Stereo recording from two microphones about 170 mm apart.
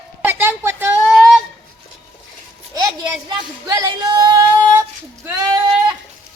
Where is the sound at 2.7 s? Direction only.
25° right (ahead or behind).